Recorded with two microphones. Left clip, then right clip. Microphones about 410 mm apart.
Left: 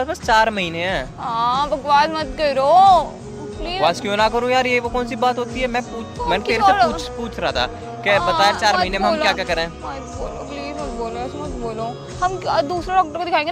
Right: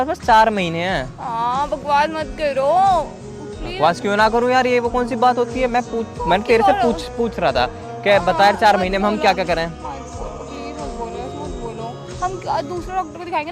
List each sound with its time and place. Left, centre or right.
0.0 s a man's voice: right
1.2 s speech: left
3.8 s a man's voice: right
6.9 s a man's voice: right
12.2 s speech: left